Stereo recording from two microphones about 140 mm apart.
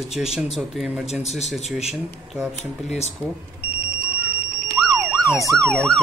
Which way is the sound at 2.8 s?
50° left (ahead or behind).